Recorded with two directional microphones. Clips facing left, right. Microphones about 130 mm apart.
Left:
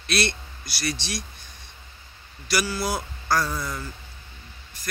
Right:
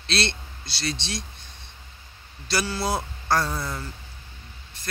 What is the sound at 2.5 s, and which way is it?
Speech, 25° right (ahead or behind).